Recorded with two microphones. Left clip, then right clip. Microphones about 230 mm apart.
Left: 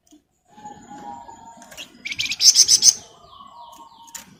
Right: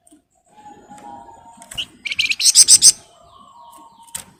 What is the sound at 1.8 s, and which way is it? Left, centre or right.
Bird, centre.